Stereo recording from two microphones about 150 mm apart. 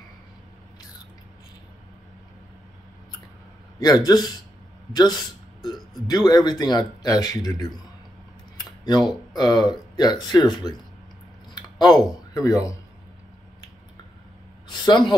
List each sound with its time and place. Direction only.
3.8 s speech: 25° left (ahead or behind)
6.0 s speech: 25° left (ahead or behind)
8.5 s a sound: 25° left (ahead or behind)
9.9 s speech: 25° left (ahead or behind)
11.8 s speech: 25° left (ahead or behind)
14.7 s speech: 30° left (ahead or behind)